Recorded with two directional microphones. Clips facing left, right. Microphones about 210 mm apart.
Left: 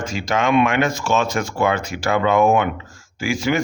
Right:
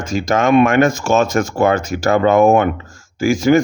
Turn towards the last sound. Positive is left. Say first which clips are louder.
# right 8 dB
turn(degrees=-45)  # may be behind; listen again after turning